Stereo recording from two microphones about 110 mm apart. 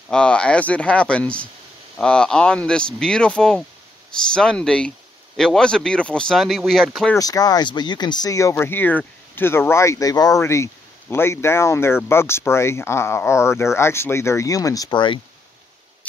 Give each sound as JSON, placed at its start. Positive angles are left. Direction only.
{"t": 0.1, "sound": "speech", "side_deg": 10}
{"t": 7.2, "sound": "speech", "side_deg": 35}